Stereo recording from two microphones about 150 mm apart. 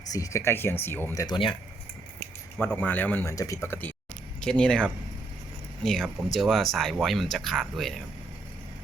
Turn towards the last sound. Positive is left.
turn(degrees=0)  # may be behind; listen again after turning